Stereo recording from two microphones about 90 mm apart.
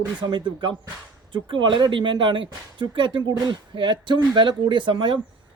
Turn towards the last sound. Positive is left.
turn(degrees=-65)  # may be behind; listen again after turning